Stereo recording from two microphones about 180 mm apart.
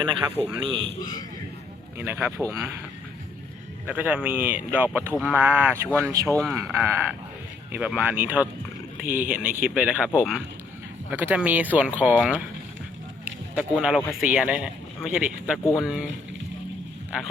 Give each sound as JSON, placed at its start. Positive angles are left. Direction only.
{"t": 0.6, "sound": "speech", "side_deg": -25}
{"t": 2.0, "sound": "a man's voice", "side_deg": -10}
{"t": 3.8, "sound": "a man's voice", "side_deg": -10}
{"t": 9.0, "sound": "speech", "side_deg": -45}
{"t": 9.6, "sound": "a man's voice", "side_deg": -5}